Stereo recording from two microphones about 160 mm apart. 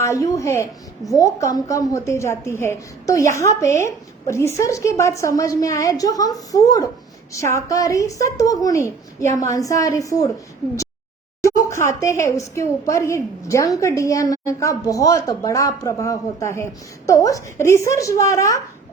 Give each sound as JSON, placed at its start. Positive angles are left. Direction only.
{"t": 0.0, "sound": "a woman's voice", "side_deg": 20}
{"t": 11.7, "sound": "a woman's voice", "side_deg": 15}